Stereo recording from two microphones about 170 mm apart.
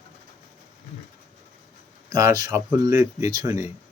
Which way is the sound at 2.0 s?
20° right (ahead or behind).